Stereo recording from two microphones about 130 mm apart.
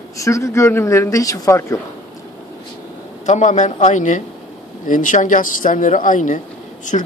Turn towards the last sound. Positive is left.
turn(degrees=75)  # may be behind; listen again after turning